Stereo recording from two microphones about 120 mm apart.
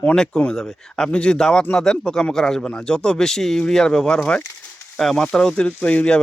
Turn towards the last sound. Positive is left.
turn(degrees=10)  # may be behind; listen again after turning